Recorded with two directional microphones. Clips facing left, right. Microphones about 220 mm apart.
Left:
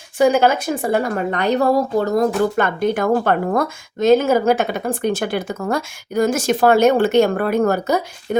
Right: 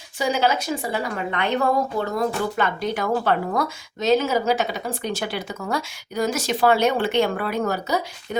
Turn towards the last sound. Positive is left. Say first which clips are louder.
# left 7 dB
turn(degrees=50)  # may be behind; listen again after turning